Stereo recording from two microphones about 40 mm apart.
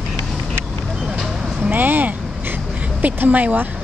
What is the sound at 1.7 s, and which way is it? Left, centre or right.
Vehicle, right.